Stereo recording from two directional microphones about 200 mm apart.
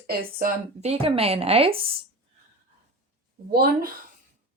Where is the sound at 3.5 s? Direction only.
50° right (ahead or behind).